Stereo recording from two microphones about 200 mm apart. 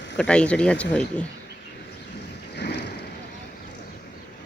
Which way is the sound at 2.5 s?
55° left (ahead or behind).